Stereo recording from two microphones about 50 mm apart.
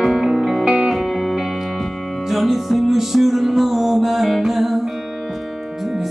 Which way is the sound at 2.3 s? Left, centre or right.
Centre.